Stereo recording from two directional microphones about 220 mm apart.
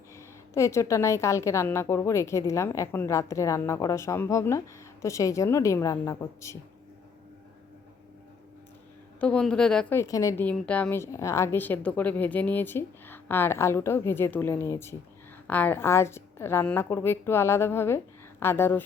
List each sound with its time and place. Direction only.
0.2 s a woman's voice: 10° left (ahead or behind)
9.2 s a woman's voice: 5° left (ahead or behind)